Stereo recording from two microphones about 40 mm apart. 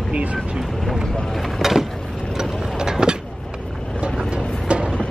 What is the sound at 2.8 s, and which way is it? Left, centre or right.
Vehicle, centre.